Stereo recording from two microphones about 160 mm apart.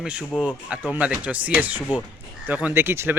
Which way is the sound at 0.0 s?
5° right (ahead or behind).